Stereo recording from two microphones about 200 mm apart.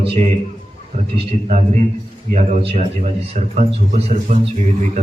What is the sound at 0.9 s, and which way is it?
Speech, 30° right (ahead or behind).